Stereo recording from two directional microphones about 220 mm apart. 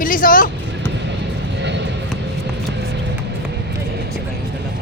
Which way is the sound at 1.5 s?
50° right (ahead or behind).